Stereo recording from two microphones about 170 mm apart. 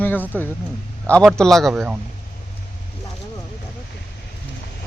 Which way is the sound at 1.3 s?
Centre (ahead or behind).